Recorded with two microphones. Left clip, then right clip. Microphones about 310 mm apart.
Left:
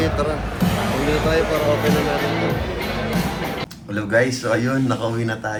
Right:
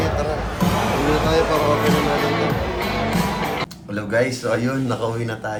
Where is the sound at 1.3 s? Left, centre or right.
Right.